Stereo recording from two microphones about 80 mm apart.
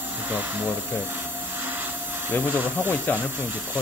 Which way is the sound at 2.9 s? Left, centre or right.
Left.